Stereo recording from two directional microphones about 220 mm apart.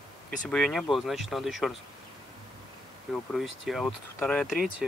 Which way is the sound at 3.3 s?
Centre (ahead or behind).